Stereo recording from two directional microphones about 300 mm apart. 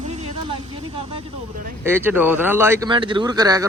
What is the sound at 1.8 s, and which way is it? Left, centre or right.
Speech, centre.